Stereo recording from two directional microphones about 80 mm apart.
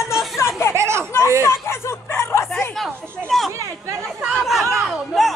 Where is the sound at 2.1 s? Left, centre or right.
Left.